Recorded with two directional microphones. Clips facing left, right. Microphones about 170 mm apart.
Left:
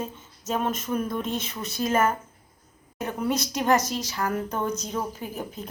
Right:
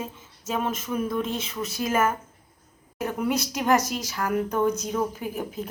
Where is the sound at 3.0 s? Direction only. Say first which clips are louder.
Right 1 dB; 10° right (ahead or behind).